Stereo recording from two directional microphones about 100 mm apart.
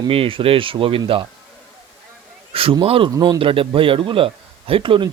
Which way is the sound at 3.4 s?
60° right (ahead or behind).